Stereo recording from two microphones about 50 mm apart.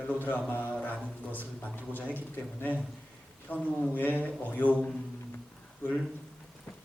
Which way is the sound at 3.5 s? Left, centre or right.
Left.